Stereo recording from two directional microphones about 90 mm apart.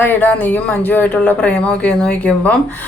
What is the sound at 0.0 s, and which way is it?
Speech, 20° left (ahead or behind).